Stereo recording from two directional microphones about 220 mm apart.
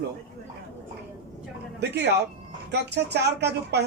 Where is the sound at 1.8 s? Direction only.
50° right (ahead or behind).